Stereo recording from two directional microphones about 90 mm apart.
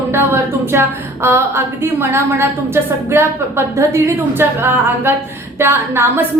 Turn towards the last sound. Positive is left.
turn(degrees=-25)  # may be behind; listen again after turning